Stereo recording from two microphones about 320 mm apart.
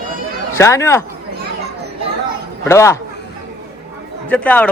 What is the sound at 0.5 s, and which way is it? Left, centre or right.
Speech, centre.